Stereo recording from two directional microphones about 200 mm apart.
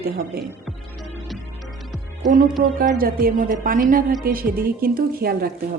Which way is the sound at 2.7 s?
45° right (ahead or behind).